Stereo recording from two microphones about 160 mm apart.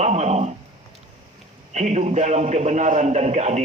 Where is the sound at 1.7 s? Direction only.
45° right (ahead or behind).